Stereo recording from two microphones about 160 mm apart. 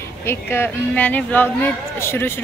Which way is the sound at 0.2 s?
15° left (ahead or behind).